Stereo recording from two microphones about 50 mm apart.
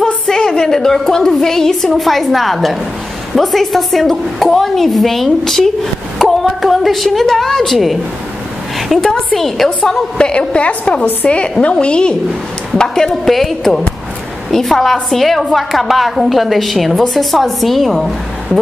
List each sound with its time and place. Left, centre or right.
0.0 s a woman's voice: centre
8.7 s a sound: centre
9.0 s a woman's voice: centre